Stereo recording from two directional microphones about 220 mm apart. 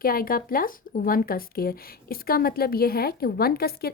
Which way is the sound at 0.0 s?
40° left (ahead or behind).